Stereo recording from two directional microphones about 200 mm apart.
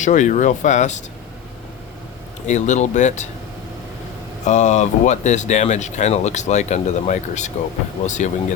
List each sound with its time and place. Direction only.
0.0 s speech: 40° left (ahead or behind)
2.5 s speech: 35° left (ahead or behind)
4.4 s speech: 35° left (ahead or behind)